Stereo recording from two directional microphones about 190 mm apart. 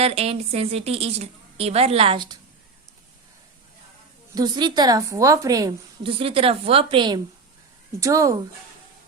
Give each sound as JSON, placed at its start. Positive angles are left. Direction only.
{"t": 0.0, "sound": "a woman's voice", "side_deg": -30}
{"t": 4.4, "sound": "a woman's voice", "side_deg": -20}